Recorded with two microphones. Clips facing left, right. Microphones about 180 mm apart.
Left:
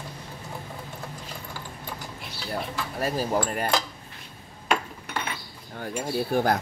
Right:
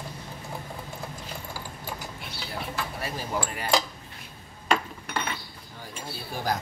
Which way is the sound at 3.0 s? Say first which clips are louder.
Left 8 dB; 40° left (ahead or behind).